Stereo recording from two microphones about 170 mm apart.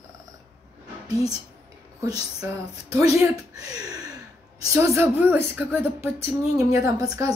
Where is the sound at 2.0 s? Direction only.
20° right (ahead or behind).